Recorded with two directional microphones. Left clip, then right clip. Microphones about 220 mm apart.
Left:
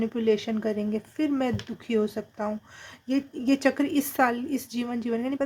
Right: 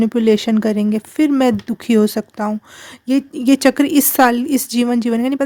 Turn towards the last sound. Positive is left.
turn(degrees=-45)  # may be behind; listen again after turning